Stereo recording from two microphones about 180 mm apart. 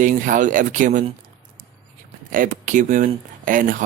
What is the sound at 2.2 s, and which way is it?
Speech, 50° right (ahead or behind).